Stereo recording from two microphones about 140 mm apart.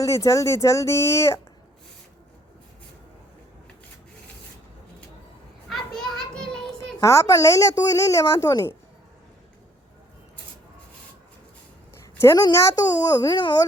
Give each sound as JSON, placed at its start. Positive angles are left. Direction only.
{"t": 0.0, "sound": "speech", "side_deg": 25}
{"t": 5.6, "sound": "children playing", "side_deg": 0}
{"t": 7.0, "sound": "speech", "side_deg": 20}
{"t": 12.1, "sound": "a sound", "side_deg": 20}
{"t": 12.4, "sound": "speech", "side_deg": 25}